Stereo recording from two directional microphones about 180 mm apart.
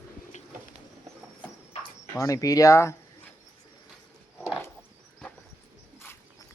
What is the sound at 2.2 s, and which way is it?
Speech, 20° left (ahead or behind).